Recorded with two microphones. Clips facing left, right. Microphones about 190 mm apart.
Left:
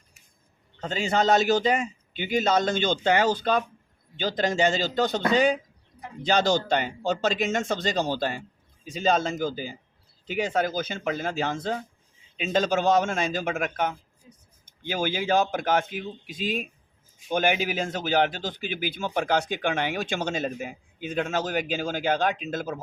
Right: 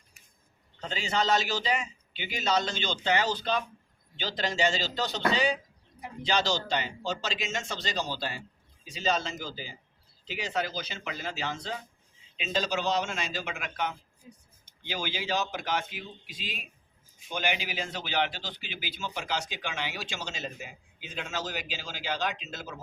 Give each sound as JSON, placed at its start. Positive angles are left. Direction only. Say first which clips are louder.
{"t": 0.8, "sound": "a man's voice", "louder": "left 6 dB", "side_deg": 50}